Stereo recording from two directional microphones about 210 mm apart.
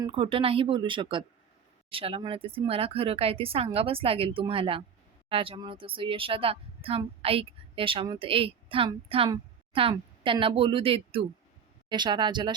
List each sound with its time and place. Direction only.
0.0 s speech: 25° right (ahead or behind)
9.3 s a sound: 25° right (ahead or behind)
9.9 s speech: 20° right (ahead or behind)